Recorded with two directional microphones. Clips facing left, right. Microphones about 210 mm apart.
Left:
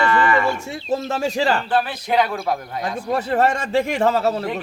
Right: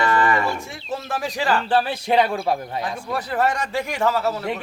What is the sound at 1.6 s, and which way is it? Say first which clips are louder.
Speech: right 1 dB; 30° right (ahead or behind).